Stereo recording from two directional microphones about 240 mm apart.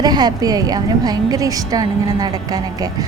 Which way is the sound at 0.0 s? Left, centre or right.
Centre.